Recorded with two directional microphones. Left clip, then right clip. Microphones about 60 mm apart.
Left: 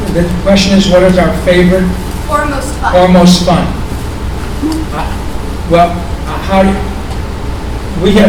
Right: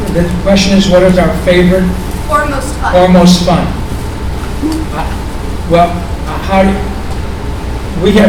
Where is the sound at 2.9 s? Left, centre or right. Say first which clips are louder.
Even; centre.